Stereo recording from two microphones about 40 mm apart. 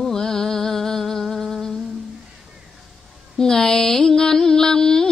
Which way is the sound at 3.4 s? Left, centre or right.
Centre.